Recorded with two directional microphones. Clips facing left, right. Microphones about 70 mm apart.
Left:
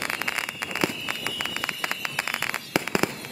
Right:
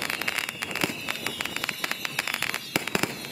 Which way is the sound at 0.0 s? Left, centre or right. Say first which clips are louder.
Left 2 dB; left.